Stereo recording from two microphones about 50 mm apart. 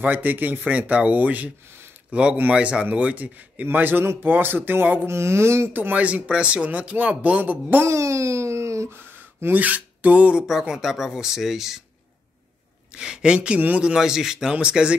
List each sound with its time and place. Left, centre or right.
0.0 s speech: right
2.0 s speech: centre
3.7 s speech: right
5.0 s speech: right
5.7 s speech: right
7.8 s a sound: right
9.5 s filing: right
10.4 s speech: centre
12.9 s speech: centre